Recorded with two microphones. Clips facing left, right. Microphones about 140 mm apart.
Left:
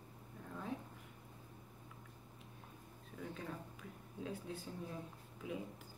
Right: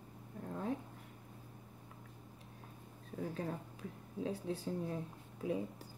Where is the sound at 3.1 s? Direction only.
35° right (ahead or behind).